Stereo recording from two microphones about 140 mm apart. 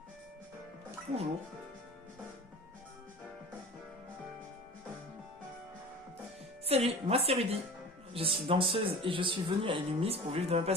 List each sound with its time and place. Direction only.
6.7 s speech: 45° right (ahead or behind)